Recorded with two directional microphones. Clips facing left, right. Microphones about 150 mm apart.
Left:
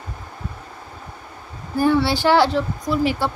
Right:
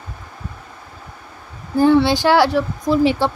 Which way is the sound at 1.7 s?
20° right (ahead or behind).